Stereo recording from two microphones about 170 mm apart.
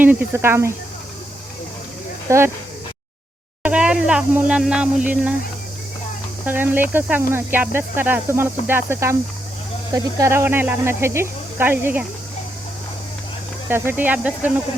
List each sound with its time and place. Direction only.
0.0 s speech: 10° right (ahead or behind)
2.3 s speech: 15° right (ahead or behind)
3.6 s speech: 5° right (ahead or behind)
6.4 s speech: 10° right (ahead or behind)
13.7 s speech: 15° right (ahead or behind)